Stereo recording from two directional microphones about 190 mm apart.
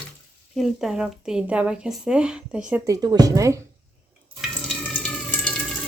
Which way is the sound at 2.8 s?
20° right (ahead or behind).